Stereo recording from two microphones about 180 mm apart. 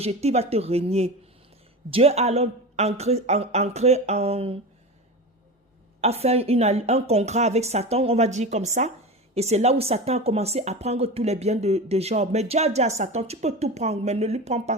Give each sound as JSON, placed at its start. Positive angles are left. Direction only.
{"t": 0.0, "sound": "speech", "side_deg": -35}
{"t": 6.0, "sound": "speech", "side_deg": -35}